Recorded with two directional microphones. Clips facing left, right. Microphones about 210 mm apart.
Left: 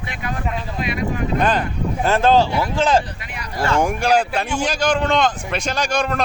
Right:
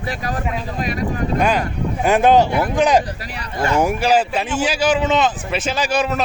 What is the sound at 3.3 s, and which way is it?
Speech, 30° right (ahead or behind).